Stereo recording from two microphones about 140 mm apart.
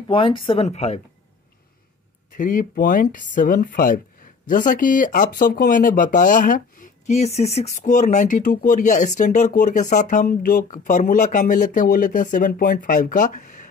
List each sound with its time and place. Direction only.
0.1 s speech: 40° left (ahead or behind)
2.3 s speech: 75° left (ahead or behind)